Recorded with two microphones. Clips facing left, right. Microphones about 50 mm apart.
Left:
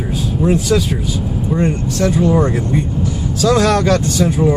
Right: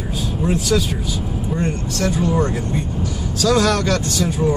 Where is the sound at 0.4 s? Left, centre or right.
Centre.